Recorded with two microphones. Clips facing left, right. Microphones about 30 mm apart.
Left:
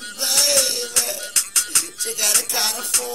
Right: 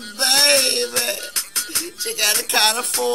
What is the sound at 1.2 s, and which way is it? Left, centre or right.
Music, right.